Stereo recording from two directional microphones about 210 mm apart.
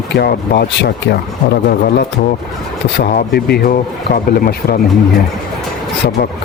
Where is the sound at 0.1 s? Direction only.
55° left (ahead or behind).